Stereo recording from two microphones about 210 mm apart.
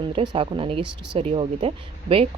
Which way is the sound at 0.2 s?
25° right (ahead or behind).